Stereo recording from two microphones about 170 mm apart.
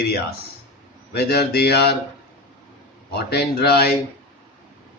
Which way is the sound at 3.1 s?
70° left (ahead or behind).